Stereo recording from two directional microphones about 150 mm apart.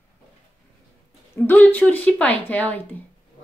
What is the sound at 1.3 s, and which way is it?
A woman's voice, 15° left (ahead or behind).